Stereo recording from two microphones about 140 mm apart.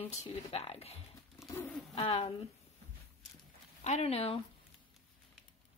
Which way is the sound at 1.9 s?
40° left (ahead or behind).